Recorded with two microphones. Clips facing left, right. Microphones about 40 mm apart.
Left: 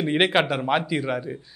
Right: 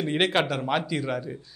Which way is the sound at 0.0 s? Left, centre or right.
Centre.